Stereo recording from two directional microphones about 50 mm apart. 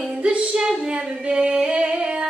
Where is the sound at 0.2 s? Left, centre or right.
Right.